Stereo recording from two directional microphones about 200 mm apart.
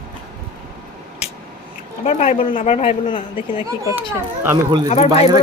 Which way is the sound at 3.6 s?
10° right (ahead or behind).